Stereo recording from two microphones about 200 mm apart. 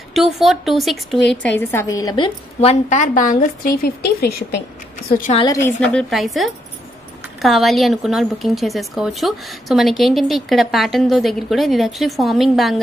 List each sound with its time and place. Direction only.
0.1 s a woman's voice: centre (ahead or behind)
1.6 s a woman's voice: 10° left (ahead or behind); by 5.3 s 45° left (ahead or behind)
5.3 s a woman's voice: 20° left (ahead or behind)
5.9 s a woman's voice: 5° left (ahead or behind)